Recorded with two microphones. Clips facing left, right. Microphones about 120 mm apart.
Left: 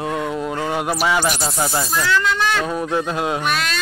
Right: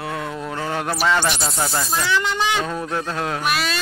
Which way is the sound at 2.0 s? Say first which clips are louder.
Left 2 dB; 15° right (ahead or behind).